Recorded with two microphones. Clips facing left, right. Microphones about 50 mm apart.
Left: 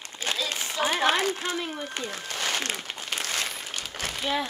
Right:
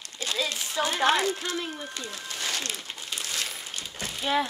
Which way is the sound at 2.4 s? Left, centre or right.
Left.